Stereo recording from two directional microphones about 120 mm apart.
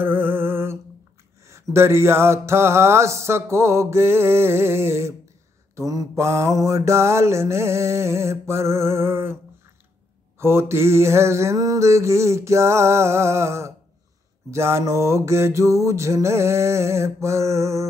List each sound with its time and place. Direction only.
0.0 s a sound: 15° right (ahead or behind)
1.5 s mantra: 20° right (ahead or behind)
10.4 s mantra: 20° right (ahead or behind)